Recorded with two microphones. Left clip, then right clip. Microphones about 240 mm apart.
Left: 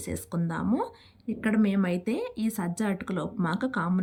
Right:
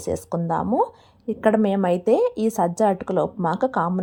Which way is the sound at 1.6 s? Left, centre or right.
Centre.